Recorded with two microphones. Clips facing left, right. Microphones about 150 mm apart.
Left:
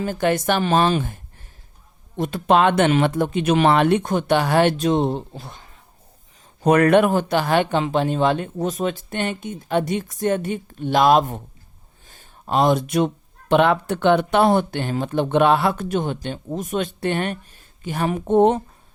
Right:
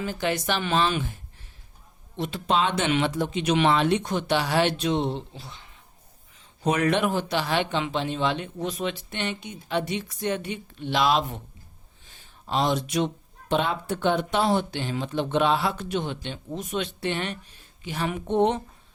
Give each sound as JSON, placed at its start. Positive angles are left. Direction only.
{"t": 0.0, "sound": "speech", "side_deg": 50}
{"t": 12.0, "sound": "a sound", "side_deg": 45}
{"t": 13.5, "sound": "speech", "side_deg": 65}